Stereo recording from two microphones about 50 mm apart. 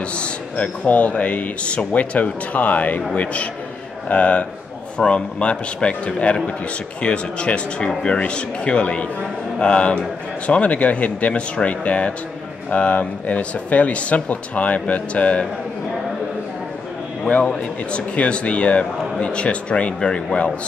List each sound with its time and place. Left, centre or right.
0.1 s speech: left
4.1 s speech: left
17.3 s speech: centre